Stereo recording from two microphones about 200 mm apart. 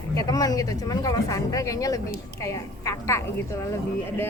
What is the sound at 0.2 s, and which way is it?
Speech, 20° left (ahead or behind).